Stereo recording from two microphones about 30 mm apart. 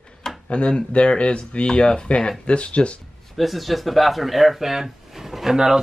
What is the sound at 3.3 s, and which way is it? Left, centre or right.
Speech, centre.